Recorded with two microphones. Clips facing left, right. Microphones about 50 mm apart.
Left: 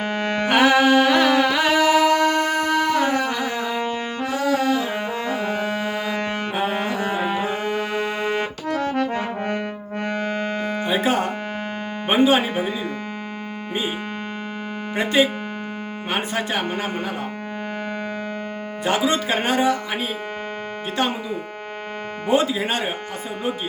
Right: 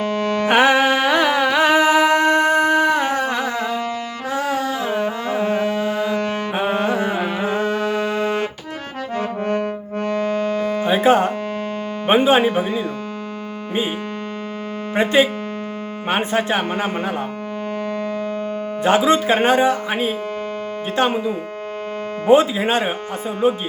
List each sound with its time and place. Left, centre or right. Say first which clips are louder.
0.0 s music: right 3 dB; left
0.4 s music: right 1 dB; right
3.7 s music: right 1 dB; left
4.3 s music: left 1 dB; right
5.6 s music: right 4 dB; left
6.5 s music: right 5 dB; right
7.2 s music: even; centre
7.8 s music: right 4 dB; left
9.1 s brass instrument: right 3 dB; left
10.0 s music: right 4 dB; left
10.8 s music: right 6 dB; right
12.0 s speech: right 3 dB; right
14.9 s speech: right 3 dB; right
18.8 s speech: right 5 dB; right